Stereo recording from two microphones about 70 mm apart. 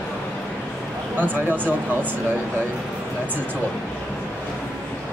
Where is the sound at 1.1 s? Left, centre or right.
Right.